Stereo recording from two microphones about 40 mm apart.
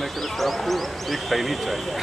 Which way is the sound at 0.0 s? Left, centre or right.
Centre.